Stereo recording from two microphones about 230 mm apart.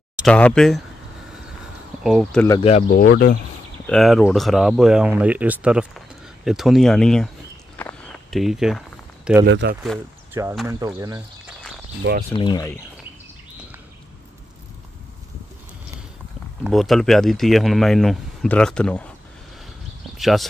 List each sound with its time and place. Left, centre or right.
0.1 s speech: centre
2.0 s speech: centre
2.9 s speech: left
3.8 s speech: centre
7.7 s a sound: centre
9.5 s speech: right
10.4 s speech: centre
12.3 s speech: left
16.6 s speech: centre
20.2 s speech: centre